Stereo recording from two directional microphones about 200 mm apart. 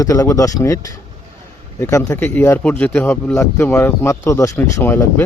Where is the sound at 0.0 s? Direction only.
15° left (ahead or behind).